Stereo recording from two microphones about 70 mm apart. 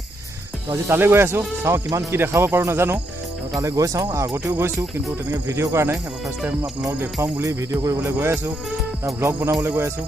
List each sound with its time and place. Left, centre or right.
0.8 s speech: right
1.9 s cricket: right
2.1 s speech: right
3.5 s cricket: right
8.1 s speech: right
9.7 s speech: right